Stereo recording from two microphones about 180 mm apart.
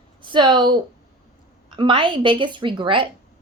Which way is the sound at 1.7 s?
25° right (ahead or behind).